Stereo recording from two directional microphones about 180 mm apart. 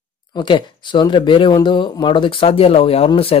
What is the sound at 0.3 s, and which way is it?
Speech, 25° left (ahead or behind).